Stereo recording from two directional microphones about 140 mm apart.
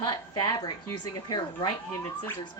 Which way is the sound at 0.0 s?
30° left (ahead or behind).